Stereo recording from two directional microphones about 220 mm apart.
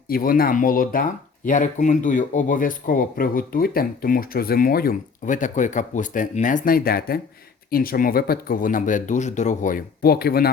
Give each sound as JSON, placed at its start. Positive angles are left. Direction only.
{"t": 0.1, "sound": "speech", "side_deg": 40}